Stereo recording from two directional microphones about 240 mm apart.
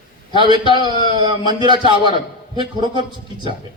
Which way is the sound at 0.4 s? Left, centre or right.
Centre.